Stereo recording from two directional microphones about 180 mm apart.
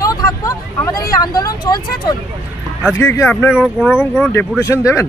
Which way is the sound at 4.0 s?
10° left (ahead or behind).